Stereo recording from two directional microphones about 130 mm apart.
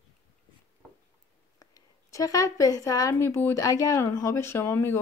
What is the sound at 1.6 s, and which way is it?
A woman's voice, 25° left (ahead or behind).